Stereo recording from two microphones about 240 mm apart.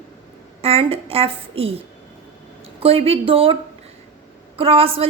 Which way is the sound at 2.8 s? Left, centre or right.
Right.